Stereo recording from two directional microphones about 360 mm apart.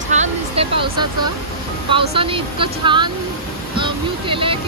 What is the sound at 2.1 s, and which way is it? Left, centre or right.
Speech, centre.